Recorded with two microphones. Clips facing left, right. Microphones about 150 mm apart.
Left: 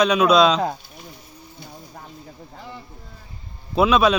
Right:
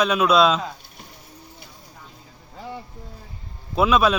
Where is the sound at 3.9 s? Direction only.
5° right (ahead or behind).